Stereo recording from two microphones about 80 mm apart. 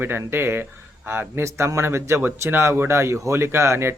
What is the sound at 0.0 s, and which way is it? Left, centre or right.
Speech, right.